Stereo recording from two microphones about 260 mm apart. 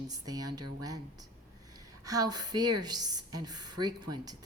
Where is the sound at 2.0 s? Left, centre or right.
Centre.